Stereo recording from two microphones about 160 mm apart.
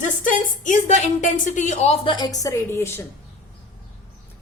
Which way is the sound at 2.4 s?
20° left (ahead or behind).